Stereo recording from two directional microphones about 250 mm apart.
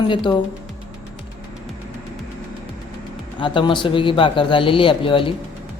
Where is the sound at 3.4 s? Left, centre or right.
Centre.